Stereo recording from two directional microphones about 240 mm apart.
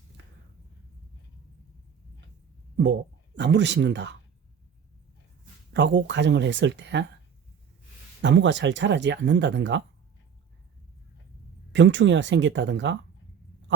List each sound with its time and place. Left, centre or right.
3.3 s speech: right
5.7 s speech: right
8.2 s speech: right
11.7 s speech: right